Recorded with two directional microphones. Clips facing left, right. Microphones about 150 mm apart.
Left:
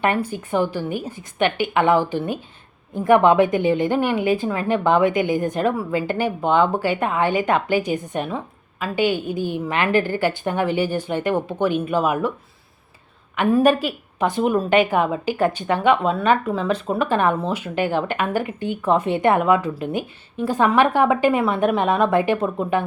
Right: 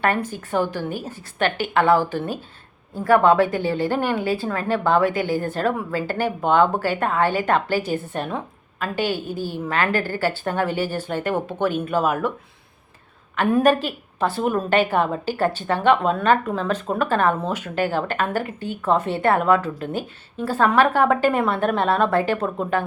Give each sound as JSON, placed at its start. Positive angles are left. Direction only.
{"t": 0.0, "sound": "a woman's voice", "side_deg": 15}
{"t": 9.6, "sound": "a woman's voice", "side_deg": 15}
{"t": 13.5, "sound": "a woman's voice", "side_deg": 10}